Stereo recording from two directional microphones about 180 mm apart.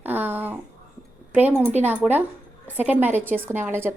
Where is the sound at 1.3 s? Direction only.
10° right (ahead or behind).